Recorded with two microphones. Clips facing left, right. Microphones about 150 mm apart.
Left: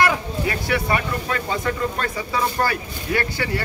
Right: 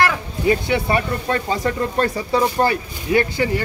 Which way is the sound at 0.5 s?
25° right (ahead or behind).